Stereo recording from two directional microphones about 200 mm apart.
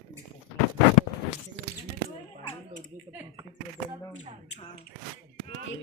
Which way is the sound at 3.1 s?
10° right (ahead or behind).